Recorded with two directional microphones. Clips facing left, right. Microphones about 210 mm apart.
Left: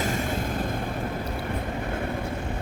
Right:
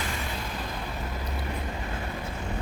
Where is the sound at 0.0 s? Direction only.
45° left (ahead or behind).